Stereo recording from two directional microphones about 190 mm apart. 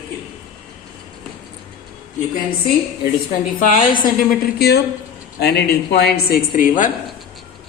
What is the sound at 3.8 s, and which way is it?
A woman's voice, 45° left (ahead or behind).